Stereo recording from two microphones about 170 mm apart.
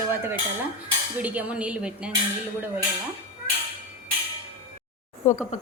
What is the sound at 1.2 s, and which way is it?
Speech, 10° right (ahead or behind).